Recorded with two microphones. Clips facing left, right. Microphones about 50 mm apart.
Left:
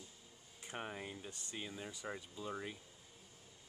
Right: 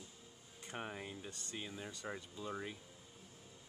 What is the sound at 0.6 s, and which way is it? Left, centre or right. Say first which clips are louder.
Speech: even; centre.